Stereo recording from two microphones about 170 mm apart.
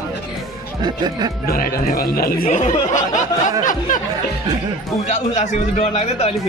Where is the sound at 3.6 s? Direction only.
50° left (ahead or behind).